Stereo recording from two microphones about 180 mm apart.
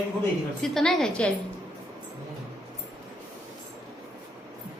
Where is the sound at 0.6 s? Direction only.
5° left (ahead or behind).